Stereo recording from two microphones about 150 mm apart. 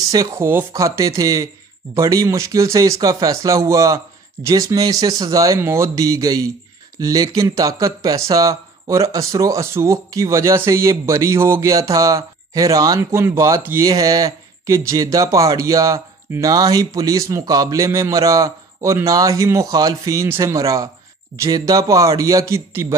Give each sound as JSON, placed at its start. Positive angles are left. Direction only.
{"t": 0.1, "sound": "speech", "side_deg": -20}